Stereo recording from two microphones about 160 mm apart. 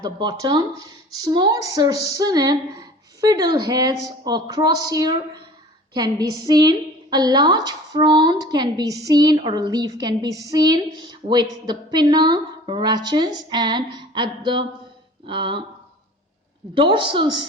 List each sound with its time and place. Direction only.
0.0 s a woman's voice: 25° right (ahead or behind)
16.7 s a woman's voice: 30° right (ahead or behind)